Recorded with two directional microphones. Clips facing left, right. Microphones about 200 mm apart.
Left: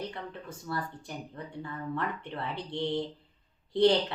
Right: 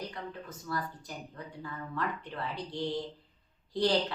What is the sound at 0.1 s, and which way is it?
Speech, 25° left (ahead or behind).